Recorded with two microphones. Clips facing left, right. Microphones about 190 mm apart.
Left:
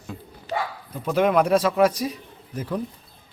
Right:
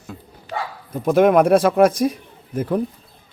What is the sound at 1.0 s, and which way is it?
Speech, 50° right (ahead or behind).